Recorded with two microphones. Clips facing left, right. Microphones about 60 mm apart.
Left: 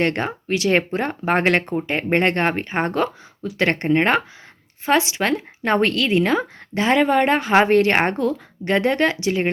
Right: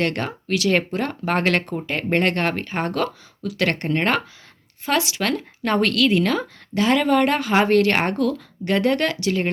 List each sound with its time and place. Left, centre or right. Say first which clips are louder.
0.0 s a woman's voice: left 2 dB; left